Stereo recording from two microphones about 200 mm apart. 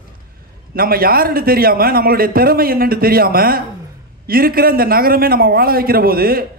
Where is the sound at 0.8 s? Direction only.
50° right (ahead or behind).